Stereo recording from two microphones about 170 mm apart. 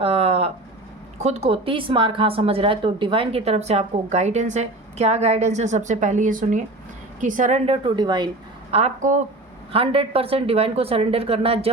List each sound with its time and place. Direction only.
0.0 s a sound: 40° right (ahead or behind)
1.2 s a woman's voice: 40° right (ahead or behind)
8.7 s a woman's voice: 45° right (ahead or behind)